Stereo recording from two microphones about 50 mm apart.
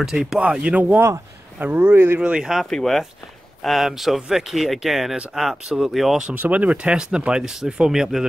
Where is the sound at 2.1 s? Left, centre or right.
Centre.